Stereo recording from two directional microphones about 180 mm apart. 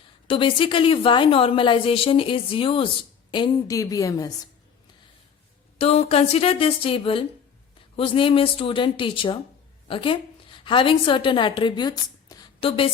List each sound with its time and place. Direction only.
0.3 s a woman's voice: 30° left (ahead or behind)
5.7 s a woman's voice: 35° left (ahead or behind)